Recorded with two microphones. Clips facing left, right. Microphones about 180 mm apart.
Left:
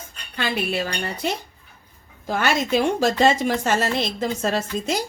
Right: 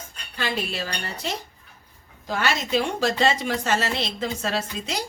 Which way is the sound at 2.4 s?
50° left (ahead or behind).